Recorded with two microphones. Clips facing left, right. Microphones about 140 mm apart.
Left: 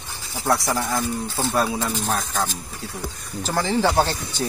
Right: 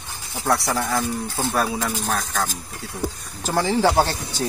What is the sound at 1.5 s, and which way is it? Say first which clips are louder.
Speech: left 1 dB; 20° left (ahead or behind).